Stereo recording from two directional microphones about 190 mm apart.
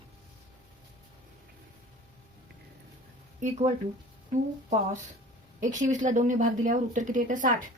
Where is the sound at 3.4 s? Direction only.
35° right (ahead or behind).